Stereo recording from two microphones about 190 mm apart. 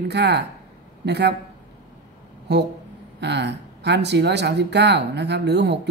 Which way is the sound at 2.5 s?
65° right (ahead or behind).